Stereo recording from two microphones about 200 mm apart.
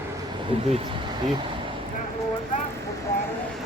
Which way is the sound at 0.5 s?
30° right (ahead or behind).